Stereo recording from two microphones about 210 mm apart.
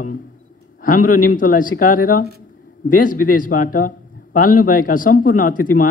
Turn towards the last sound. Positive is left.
turn(degrees=40)  # may be behind; listen again after turning